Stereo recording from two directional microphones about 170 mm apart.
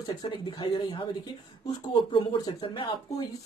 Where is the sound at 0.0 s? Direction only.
25° left (ahead or behind).